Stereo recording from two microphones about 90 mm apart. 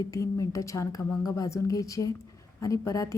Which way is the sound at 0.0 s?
40° left (ahead or behind).